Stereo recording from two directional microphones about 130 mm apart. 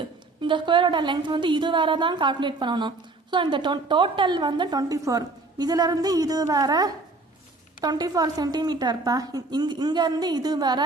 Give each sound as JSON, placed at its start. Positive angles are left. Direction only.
{"t": 0.4, "sound": "a woman's voice", "side_deg": -40}